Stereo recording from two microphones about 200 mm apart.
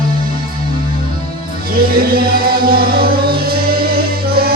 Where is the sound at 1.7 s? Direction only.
45° right (ahead or behind).